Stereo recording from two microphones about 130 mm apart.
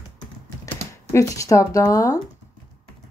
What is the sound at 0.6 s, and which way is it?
Speech, 20° left (ahead or behind).